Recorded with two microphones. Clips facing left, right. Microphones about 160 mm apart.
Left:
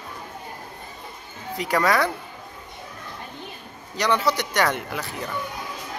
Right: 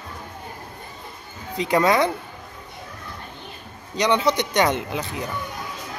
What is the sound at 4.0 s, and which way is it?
Speech, 20° right (ahead or behind).